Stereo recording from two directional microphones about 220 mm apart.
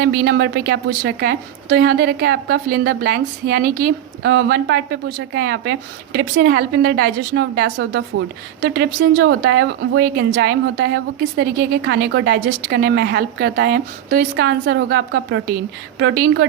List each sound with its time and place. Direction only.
0.0 s a woman's voice: 50° right (ahead or behind)